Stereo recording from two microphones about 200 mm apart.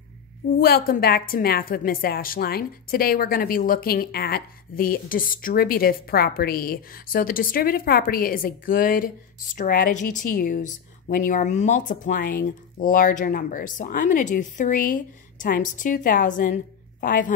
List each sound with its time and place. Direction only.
0.6 s a woman's voice: 50° left (ahead or behind)